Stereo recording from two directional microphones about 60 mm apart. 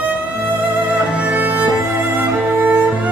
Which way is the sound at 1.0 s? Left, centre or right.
Right.